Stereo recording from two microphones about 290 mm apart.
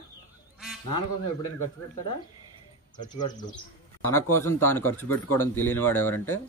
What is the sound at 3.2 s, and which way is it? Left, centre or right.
Speech, centre.